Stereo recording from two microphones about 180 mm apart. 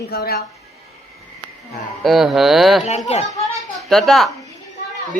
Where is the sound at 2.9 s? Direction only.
35° left (ahead or behind).